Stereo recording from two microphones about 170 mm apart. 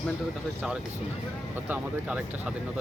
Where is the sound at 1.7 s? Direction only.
5° right (ahead or behind).